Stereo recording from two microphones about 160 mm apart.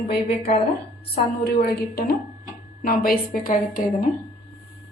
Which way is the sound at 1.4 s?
75° left (ahead or behind).